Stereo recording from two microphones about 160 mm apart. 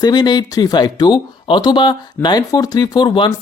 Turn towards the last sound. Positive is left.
turn(degrees=30)  # may be behind; listen again after turning